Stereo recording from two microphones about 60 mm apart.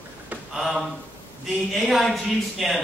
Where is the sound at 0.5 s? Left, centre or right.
Centre.